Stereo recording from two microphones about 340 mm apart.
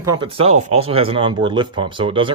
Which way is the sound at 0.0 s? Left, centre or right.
Centre.